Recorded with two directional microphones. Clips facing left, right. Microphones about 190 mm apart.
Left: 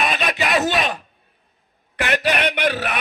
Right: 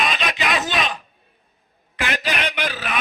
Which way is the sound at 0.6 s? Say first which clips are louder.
Left 4 dB; 55° left (ahead or behind).